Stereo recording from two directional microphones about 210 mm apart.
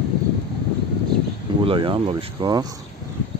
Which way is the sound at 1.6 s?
25° right (ahead or behind).